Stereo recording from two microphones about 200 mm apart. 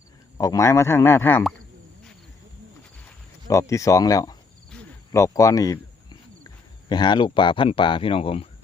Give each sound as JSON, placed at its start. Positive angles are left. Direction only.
{"t": 0.3, "sound": "a man's voice", "side_deg": 15}
{"t": 3.5, "sound": "a man's voice", "side_deg": 15}
{"t": 4.7, "sound": "a sound", "side_deg": 15}
{"t": 6.8, "sound": "speech", "side_deg": 20}